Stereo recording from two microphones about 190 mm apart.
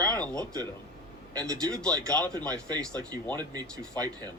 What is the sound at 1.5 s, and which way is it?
Speech, 20° right (ahead or behind).